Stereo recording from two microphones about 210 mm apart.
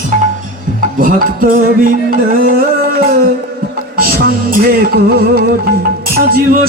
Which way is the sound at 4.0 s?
45° right (ahead or behind).